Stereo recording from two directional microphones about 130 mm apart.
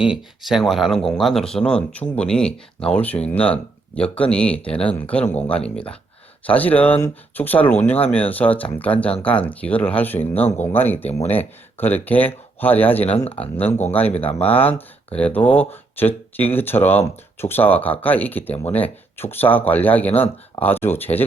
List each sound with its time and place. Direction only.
0.0 s speech: 5° right (ahead or behind); by 10.4 s 15° left (ahead or behind)
10.4 s speech: 60° left (ahead or behind)
10.8 s speech: 15° left (ahead or behind)